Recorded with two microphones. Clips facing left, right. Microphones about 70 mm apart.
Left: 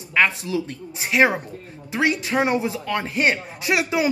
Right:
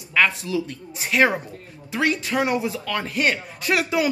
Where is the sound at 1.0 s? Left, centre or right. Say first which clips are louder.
Left 1 dB; centre.